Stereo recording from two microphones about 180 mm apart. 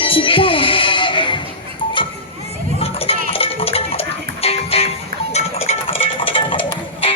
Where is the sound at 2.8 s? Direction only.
30° left (ahead or behind).